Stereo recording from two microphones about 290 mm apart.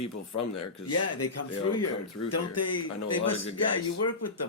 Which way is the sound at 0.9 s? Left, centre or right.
Left.